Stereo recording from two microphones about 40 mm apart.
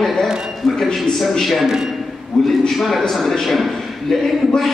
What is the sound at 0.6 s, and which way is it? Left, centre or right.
A man's voice, centre.